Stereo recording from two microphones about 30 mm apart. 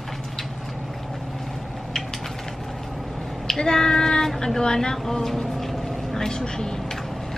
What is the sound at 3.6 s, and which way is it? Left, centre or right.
Child singing, centre.